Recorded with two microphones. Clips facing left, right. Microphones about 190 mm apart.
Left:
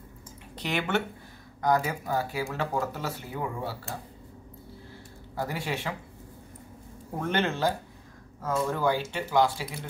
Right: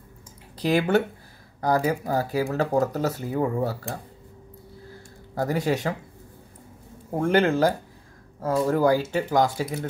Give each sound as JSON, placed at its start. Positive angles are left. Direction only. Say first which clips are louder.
{"t": 0.6, "sound": "speech", "louder": "right 8 dB", "side_deg": -35}
{"t": 5.3, "sound": "speech", "louder": "right 8 dB", "side_deg": -45}
{"t": 7.2, "sound": "speech", "louder": "right 8 dB", "side_deg": -35}